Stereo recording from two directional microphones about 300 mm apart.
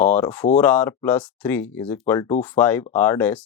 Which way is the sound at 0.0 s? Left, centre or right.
Centre.